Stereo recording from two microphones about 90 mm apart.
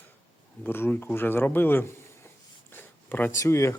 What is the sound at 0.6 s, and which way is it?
Speech, 25° left (ahead or behind).